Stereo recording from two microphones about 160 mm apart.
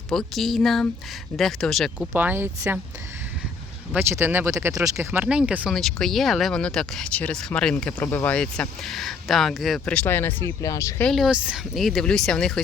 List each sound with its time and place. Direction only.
0.1 s speech: centre (ahead or behind)
2.1 s speech: 10° right (ahead or behind)
3.9 s speech: 15° right (ahead or behind)
5.2 s speech: 5° right (ahead or behind); by 11.1 s 15° left (ahead or behind)
11.1 s speech: 5° right (ahead or behind)